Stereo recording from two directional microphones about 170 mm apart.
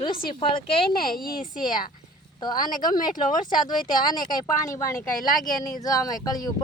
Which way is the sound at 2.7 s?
55° left (ahead or behind).